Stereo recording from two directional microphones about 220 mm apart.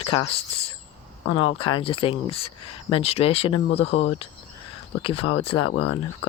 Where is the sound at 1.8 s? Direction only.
25° left (ahead or behind).